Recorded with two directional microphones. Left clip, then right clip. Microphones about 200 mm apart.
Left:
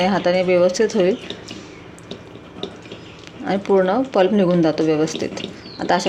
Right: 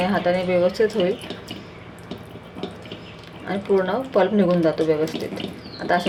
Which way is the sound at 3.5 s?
50° left (ahead or behind).